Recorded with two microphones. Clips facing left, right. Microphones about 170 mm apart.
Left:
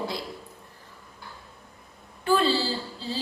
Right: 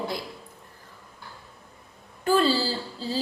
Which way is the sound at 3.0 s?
40° right (ahead or behind).